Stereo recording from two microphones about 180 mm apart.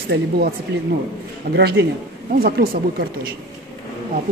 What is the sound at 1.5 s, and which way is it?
Speech, 65° right (ahead or behind).